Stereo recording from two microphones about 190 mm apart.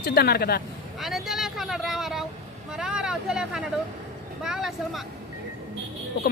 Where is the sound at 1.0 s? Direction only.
Centre (ahead or behind).